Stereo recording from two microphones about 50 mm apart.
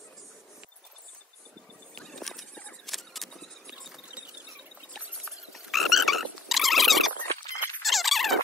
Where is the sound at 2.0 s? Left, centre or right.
Centre.